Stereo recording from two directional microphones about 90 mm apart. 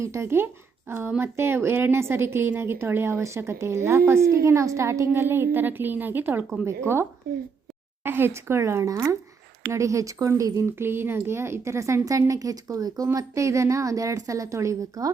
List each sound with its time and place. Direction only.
0.0 s a woman's voice: 30° right (ahead or behind)
10.7 s a woman's voice: 25° right (ahead or behind)